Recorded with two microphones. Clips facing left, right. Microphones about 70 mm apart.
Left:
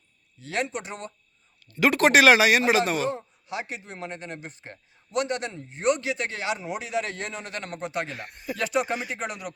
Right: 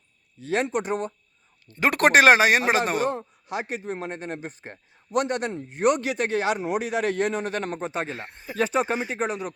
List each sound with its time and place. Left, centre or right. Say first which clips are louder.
0.3 s speech: right 5 dB; right